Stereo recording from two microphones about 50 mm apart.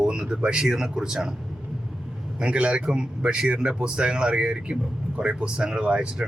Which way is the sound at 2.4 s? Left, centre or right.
Right.